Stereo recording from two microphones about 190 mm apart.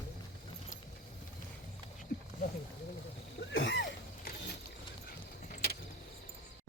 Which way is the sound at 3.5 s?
80° left.